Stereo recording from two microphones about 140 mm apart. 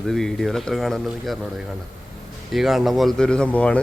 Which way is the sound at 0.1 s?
Centre (ahead or behind).